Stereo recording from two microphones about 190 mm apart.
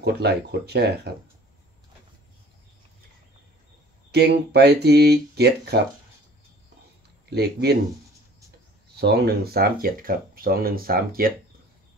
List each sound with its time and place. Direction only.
0.0 s speech: 60° right (ahead or behind)
4.1 s speech: 60° right (ahead or behind)
7.2 s speech: 60° right (ahead or behind)
9.0 s speech: 55° right (ahead or behind)